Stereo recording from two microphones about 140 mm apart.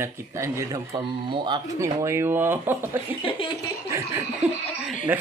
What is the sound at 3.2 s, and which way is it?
Laughter, 40° left (ahead or behind).